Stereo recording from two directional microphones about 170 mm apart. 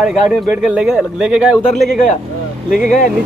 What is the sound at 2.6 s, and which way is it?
Speech, 55° left (ahead or behind).